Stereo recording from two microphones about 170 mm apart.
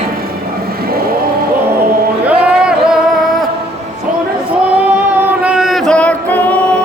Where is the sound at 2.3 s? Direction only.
10° right (ahead or behind).